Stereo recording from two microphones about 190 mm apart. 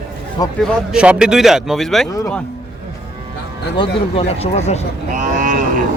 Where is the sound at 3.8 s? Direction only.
30° left (ahead or behind).